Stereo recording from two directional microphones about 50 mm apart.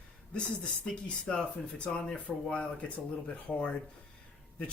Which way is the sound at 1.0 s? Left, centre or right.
Centre.